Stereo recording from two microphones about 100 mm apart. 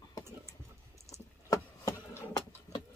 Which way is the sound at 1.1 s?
35° left (ahead or behind).